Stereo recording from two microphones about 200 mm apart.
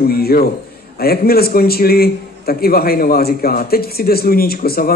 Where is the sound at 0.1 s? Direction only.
50° left (ahead or behind).